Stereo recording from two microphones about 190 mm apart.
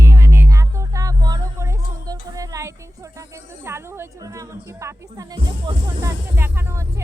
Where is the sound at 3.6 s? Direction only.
15° right (ahead or behind).